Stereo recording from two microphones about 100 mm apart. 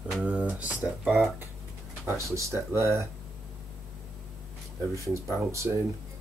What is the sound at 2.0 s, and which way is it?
Speech, 25° right (ahead or behind).